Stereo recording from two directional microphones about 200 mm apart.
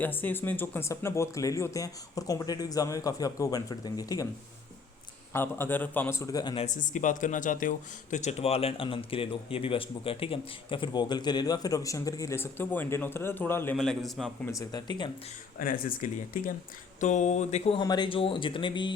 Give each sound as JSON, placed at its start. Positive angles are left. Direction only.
{"t": 0.0, "sound": "speech", "side_deg": 10}
{"t": 5.3, "sound": "speech", "side_deg": 10}
{"t": 6.7, "sound": "a man's voice", "side_deg": 40}
{"t": 14.5, "sound": "speech", "side_deg": 20}
{"t": 15.5, "sound": "speech", "side_deg": 45}
{"t": 17.7, "sound": "speech", "side_deg": 20}